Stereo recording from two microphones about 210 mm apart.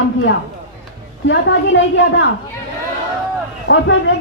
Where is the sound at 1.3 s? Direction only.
60° left (ahead or behind).